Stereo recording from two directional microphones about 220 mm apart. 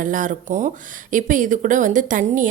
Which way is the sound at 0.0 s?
35° right (ahead or behind).